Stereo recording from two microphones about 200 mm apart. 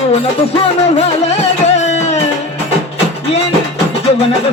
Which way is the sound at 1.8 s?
35° left (ahead or behind).